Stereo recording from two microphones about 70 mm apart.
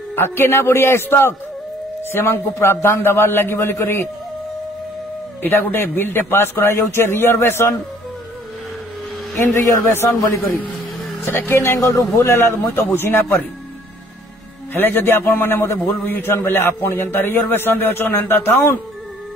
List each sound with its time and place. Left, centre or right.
0.1 s a man's voice: left
5.4 s a man's voice: left
9.4 s a man's voice: left
14.7 s a man's voice: left